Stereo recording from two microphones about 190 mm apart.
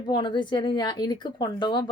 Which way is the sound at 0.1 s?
25° left (ahead or behind).